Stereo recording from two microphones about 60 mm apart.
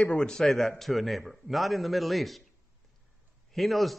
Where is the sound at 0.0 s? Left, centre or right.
Centre.